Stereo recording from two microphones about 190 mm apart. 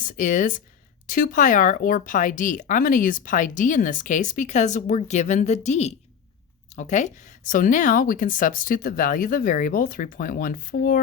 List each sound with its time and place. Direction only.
0.0 s speech: 45° left (ahead or behind)